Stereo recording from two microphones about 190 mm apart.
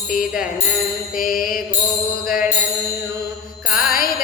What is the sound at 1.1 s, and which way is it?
Mantra, 50° left (ahead or behind).